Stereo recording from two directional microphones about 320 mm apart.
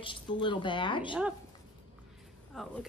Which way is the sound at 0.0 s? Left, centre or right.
Centre.